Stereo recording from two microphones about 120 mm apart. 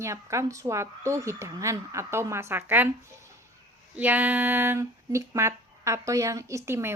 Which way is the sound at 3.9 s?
15° right (ahead or behind).